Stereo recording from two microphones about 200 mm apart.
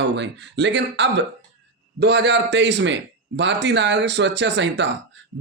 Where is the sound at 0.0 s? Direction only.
60° right (ahead or behind).